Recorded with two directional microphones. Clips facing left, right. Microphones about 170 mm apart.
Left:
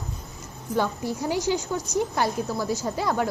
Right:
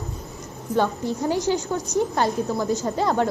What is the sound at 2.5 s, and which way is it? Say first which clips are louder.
Speech: right 3 dB; 20° right (ahead or behind).